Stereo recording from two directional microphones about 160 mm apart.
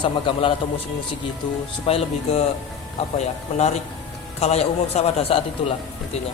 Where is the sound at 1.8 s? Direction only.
40° left (ahead or behind).